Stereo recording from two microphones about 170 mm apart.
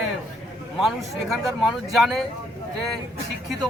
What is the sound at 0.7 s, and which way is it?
Speech, centre (ahead or behind).